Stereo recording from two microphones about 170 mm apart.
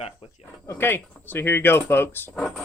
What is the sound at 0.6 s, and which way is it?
Speech, 15° left (ahead or behind).